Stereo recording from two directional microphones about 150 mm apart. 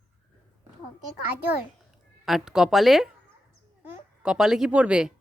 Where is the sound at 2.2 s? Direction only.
Centre (ahead or behind).